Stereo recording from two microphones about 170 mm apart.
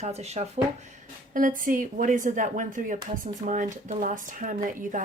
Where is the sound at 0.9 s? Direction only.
55° right (ahead or behind).